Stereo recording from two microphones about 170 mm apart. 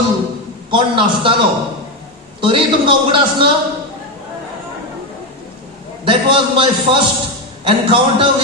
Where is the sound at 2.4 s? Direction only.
30° right (ahead or behind).